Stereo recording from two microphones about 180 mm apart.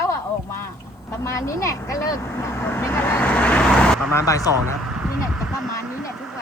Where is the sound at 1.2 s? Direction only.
15° left (ahead or behind).